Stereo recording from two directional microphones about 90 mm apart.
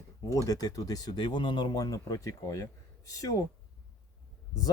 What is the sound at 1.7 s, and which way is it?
Speech, 40° left (ahead or behind).